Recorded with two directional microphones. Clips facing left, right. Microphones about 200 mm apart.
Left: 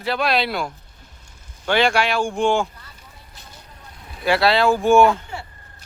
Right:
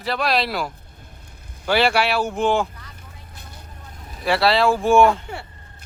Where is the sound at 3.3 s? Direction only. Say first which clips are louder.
Right 2 dB; 55° right (ahead or behind).